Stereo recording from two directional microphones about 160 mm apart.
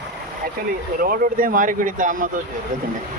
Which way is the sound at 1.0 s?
60° right (ahead or behind).